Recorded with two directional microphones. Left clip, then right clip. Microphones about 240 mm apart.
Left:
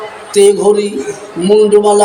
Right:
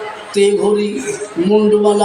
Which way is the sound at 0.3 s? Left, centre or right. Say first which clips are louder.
Left 5 dB; left.